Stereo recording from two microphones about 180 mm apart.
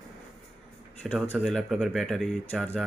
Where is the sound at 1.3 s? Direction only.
5° left (ahead or behind).